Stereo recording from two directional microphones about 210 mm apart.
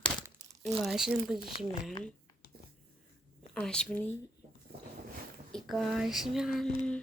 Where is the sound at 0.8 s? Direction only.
Centre (ahead or behind).